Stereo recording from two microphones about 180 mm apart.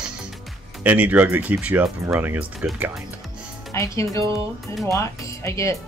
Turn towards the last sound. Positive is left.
turn(degrees=15)  # may be behind; listen again after turning